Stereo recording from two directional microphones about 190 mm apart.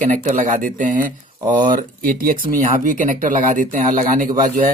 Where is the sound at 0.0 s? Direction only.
40° right (ahead or behind).